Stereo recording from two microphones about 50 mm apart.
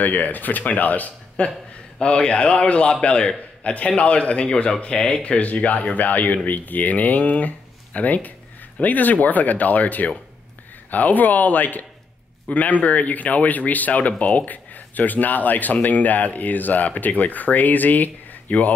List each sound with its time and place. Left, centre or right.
0.0 s a man's voice: left